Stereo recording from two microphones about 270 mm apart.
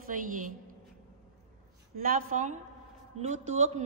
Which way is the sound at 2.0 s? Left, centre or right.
Right.